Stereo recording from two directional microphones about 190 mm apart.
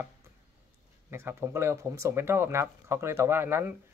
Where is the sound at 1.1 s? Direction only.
15° right (ahead or behind).